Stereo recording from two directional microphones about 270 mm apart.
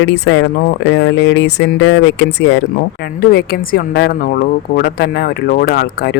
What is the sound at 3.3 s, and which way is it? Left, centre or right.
Speech, left.